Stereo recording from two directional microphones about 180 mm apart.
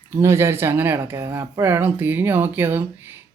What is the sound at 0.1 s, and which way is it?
Speech, 15° right (ahead or behind).